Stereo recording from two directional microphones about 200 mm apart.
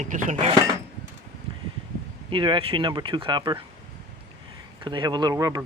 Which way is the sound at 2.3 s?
25° right (ahead or behind).